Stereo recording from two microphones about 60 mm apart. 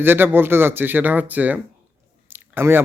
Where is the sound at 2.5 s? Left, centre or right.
Right.